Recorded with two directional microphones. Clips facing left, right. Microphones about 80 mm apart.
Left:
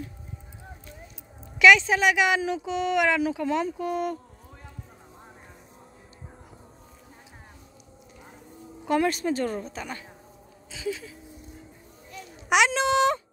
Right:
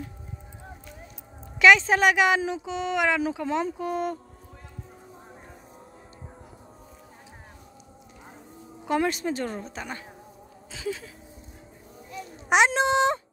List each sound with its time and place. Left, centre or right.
1.6 s a woman's voice: right
2.5 s speech: right
8.8 s speech: right
10.7 s speech: right
12.1 s a sound: right